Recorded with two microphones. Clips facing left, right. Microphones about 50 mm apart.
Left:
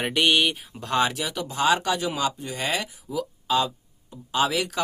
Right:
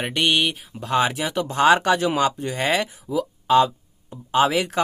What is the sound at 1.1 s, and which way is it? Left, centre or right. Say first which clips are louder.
Speech: right 5 dB; right.